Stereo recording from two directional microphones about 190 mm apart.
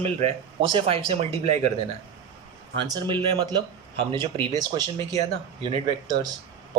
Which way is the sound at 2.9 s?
25° right (ahead or behind).